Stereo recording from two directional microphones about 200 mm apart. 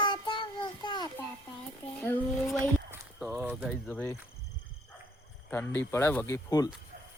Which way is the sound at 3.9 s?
10° left (ahead or behind).